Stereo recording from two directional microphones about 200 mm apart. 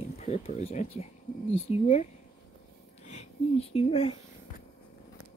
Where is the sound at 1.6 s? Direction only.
30° left (ahead or behind).